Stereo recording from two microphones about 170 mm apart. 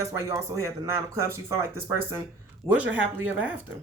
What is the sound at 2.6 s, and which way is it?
Speech, centre (ahead or behind).